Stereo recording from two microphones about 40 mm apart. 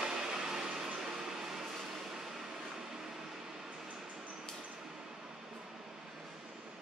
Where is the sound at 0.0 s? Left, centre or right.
Centre.